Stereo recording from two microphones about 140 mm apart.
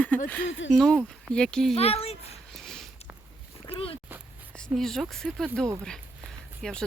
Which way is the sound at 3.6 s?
40° left (ahead or behind).